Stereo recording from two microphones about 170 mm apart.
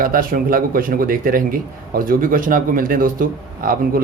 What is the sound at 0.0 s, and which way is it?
Speech, 55° right (ahead or behind).